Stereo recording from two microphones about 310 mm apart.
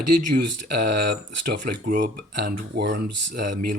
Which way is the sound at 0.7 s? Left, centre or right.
Right.